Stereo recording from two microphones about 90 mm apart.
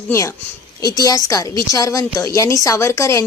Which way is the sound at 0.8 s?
45° left (ahead or behind).